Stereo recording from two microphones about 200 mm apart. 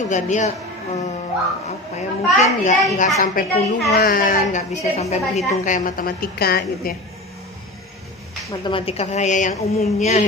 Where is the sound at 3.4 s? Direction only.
45° left (ahead or behind).